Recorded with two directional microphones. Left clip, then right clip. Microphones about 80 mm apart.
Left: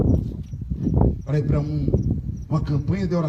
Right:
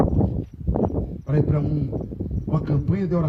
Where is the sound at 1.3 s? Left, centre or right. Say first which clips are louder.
Right 1 dB; right.